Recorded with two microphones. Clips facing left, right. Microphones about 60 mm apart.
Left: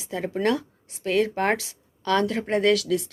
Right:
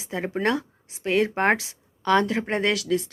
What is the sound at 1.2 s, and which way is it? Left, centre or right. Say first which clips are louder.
Speech: right 1 dB; right.